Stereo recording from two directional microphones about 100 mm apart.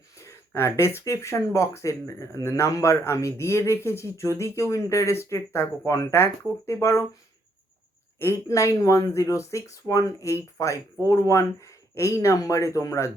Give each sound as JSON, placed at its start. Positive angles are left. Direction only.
{"t": 0.2, "sound": "speech", "side_deg": 25}
{"t": 8.2, "sound": "speech", "side_deg": 30}